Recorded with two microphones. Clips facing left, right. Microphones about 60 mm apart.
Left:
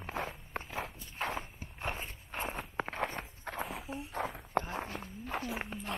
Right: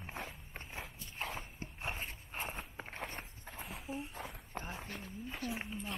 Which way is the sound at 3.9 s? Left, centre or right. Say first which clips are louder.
Left 1 dB; left.